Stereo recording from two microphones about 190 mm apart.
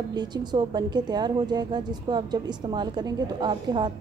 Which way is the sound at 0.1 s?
20° right (ahead or behind).